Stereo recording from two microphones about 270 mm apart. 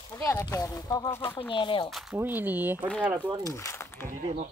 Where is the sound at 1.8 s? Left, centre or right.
Centre.